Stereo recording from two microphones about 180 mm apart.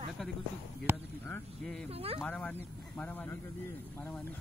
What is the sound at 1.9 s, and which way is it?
Speech, 35° right (ahead or behind).